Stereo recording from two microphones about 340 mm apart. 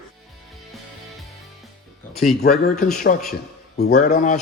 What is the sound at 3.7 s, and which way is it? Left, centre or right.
Speech, left.